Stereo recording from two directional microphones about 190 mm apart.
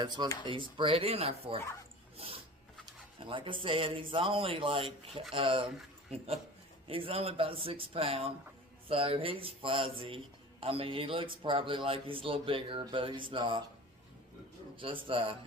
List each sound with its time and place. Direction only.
0.4 s a man's voice: 25° right (ahead or behind)
2.8 s a man's voice: 25° right (ahead or behind)
14.8 s a man's voice: 25° right (ahead or behind)